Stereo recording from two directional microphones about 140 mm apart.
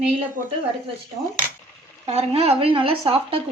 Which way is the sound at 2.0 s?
45° right (ahead or behind).